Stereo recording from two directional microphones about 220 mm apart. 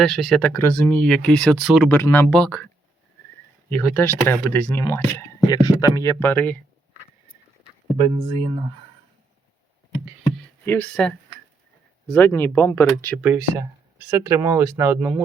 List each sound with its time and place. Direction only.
0.0 s speech: centre (ahead or behind)
3.7 s speech: 10° left (ahead or behind)
7.9 s speech: 20° right (ahead or behind)
9.9 s a sound: 5° right (ahead or behind)
10.7 s speech: 5° left (ahead or behind)
14.1 s speech: 10° right (ahead or behind)